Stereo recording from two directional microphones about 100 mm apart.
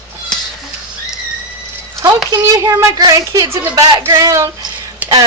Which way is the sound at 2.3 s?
30° right (ahead or behind).